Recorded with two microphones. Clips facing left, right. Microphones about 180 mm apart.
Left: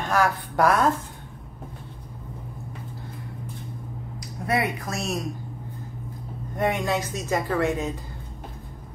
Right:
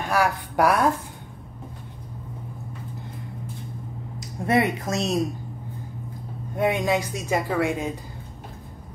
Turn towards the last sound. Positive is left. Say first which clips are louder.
# even
turn(degrees=-15)  # may be behind; listen again after turning